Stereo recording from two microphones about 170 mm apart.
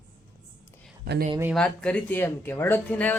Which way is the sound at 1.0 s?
60° right (ahead or behind).